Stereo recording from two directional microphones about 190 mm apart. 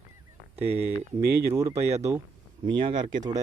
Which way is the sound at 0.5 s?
30° right (ahead or behind).